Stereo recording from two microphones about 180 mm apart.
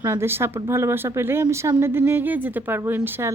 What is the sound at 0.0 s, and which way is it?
Speech, 15° right (ahead or behind).